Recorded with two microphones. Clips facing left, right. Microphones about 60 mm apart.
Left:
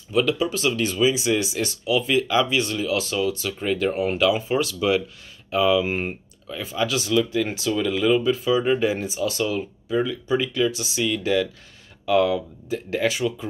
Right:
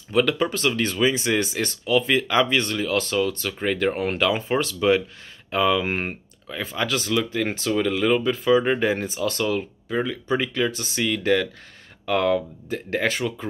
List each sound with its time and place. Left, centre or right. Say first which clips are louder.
0.1 s speech: right 1 dB; right